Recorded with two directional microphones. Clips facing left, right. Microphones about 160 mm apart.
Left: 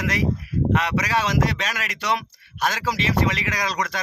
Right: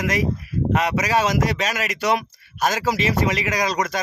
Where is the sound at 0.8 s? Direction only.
45° right (ahead or behind).